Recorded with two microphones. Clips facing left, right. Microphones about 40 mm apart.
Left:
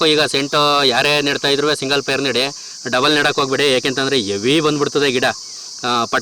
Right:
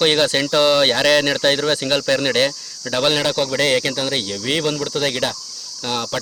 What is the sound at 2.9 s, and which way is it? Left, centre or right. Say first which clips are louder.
Speech: left 4 dB; left.